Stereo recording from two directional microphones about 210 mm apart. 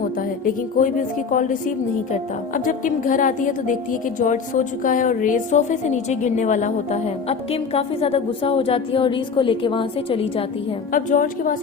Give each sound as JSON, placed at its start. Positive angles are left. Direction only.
{"t": 1.3, "sound": "a woman's voice", "side_deg": 40}
{"t": 10.9, "sound": "a woman's voice", "side_deg": 40}